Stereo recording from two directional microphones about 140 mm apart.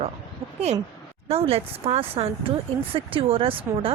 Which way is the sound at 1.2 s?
45° right (ahead or behind).